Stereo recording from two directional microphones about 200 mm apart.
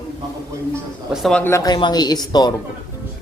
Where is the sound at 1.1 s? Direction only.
Centre (ahead or behind); by 2.5 s 20° left (ahead or behind).